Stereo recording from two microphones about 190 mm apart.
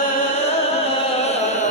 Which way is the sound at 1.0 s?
35° left (ahead or behind).